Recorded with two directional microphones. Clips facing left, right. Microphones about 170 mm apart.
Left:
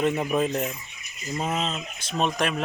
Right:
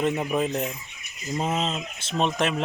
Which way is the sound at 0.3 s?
15° right (ahead or behind).